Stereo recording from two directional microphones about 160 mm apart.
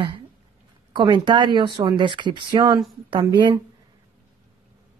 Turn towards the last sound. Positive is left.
turn(degrees=-25)  # may be behind; listen again after turning